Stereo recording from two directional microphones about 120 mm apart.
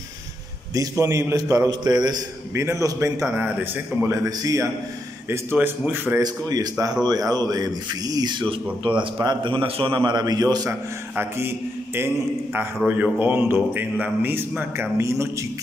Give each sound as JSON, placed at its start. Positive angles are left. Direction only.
{"t": 0.7, "sound": "a man's voice", "side_deg": -25}
{"t": 2.5, "sound": "a man's voice", "side_deg": -25}
{"t": 5.3, "sound": "a man's voice", "side_deg": -20}
{"t": 6.2, "sound": "speech", "side_deg": -35}
{"t": 11.1, "sound": "a man's voice", "side_deg": -20}